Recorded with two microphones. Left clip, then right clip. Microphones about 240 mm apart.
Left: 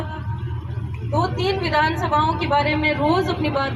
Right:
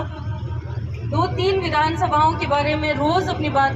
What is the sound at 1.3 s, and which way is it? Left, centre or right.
A woman's voice, centre.